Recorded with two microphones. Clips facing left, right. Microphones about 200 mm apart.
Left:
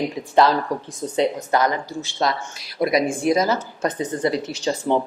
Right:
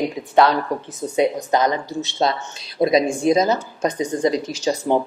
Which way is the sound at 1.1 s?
15° right (ahead or behind).